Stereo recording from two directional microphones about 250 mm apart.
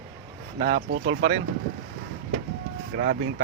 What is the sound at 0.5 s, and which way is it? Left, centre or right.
Speech, right.